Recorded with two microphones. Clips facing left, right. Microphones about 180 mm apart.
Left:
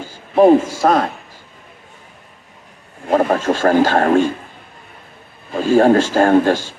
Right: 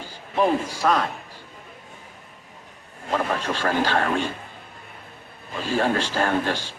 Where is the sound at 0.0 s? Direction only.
45° left (ahead or behind).